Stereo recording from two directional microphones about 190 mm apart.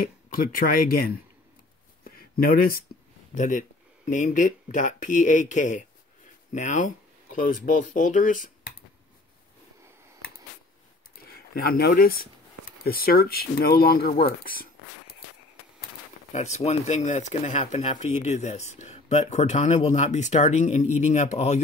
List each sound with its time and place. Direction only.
0.0 s speech: 45° left (ahead or behind)
3.3 s speech: 40° left (ahead or behind)
11.2 s speech: 55° left (ahead or behind)
16.3 s speech: 40° left (ahead or behind)